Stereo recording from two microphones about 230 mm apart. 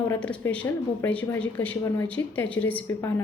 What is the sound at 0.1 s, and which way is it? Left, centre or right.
A woman's voice, centre.